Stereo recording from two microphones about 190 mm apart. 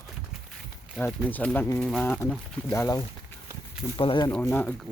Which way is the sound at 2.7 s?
15° left (ahead or behind).